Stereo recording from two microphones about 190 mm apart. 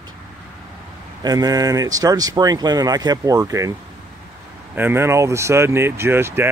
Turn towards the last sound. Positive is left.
turn(degrees=-10)  # may be behind; listen again after turning